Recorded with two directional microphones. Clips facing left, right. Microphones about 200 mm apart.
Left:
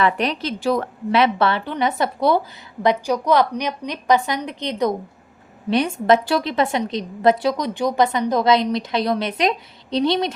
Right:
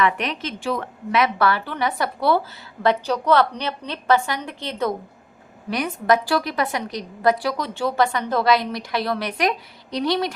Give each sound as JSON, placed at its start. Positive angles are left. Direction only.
{"t": 0.0, "sound": "a woman's voice", "side_deg": 35}